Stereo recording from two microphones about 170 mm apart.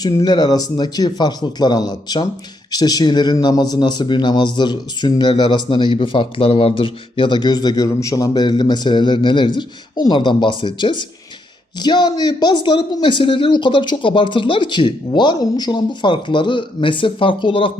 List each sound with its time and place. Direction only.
0.0 s speech: 25° left (ahead or behind)